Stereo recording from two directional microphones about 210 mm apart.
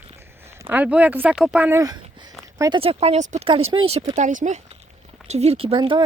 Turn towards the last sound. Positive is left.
turn(degrees=-25)  # may be behind; listen again after turning